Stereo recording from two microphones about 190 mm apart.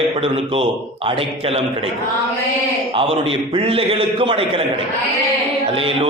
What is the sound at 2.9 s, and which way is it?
A man's voice, 30° right (ahead or behind).